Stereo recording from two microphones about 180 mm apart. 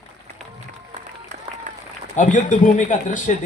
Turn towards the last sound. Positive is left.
turn(degrees=45)  # may be behind; listen again after turning